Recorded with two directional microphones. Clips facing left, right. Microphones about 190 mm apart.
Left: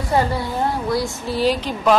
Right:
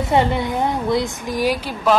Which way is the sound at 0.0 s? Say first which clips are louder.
Right 2 dB; 20° right (ahead or behind).